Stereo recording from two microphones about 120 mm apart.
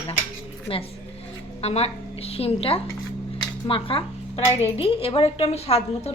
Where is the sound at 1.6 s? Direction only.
60° left (ahead or behind).